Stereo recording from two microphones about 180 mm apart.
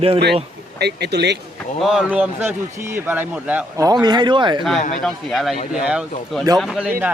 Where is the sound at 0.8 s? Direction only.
65° right (ahead or behind).